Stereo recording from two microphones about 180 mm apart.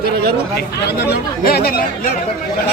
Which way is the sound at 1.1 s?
60° left (ahead or behind).